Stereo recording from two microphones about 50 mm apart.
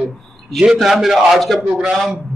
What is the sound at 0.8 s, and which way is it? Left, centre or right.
Speech, centre.